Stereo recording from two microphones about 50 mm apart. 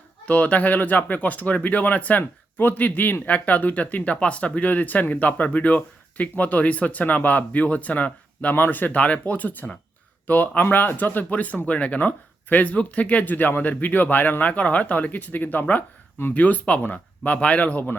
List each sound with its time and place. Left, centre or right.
0.3 s speech: left